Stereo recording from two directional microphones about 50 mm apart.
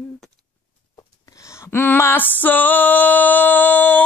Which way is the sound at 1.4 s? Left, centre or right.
Left.